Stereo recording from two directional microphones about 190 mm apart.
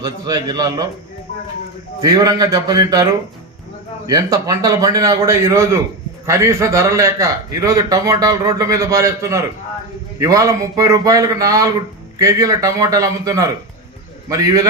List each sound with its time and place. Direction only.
0.0 s a man's voice: 20° right (ahead or behind)
2.0 s a man's voice: 20° right (ahead or behind)